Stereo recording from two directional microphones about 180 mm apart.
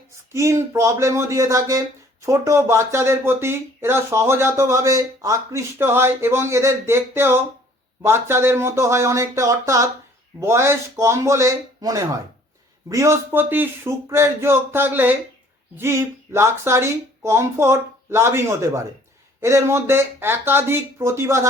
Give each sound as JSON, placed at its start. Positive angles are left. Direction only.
{"t": 0.3, "sound": "speech", "side_deg": -15}